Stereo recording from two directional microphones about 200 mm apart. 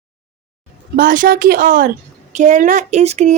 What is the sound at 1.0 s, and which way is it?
A woman's voice, 45° right (ahead or behind).